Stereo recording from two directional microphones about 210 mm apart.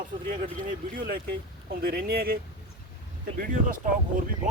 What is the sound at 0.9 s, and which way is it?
Speech, 45° right (ahead or behind).